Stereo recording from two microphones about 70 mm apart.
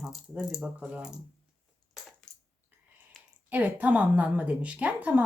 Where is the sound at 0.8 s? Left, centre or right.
Centre.